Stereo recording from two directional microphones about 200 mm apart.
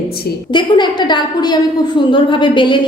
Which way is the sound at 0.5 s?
20° left (ahead or behind).